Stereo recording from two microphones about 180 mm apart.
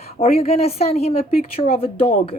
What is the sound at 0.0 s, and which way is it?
Speech, 35° left (ahead or behind).